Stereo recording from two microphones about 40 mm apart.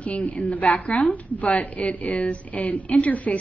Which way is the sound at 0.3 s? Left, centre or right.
Left.